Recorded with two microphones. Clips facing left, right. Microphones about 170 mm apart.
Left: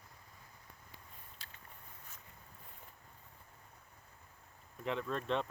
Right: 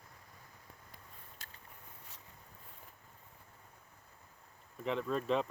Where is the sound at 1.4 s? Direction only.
45° right (ahead or behind).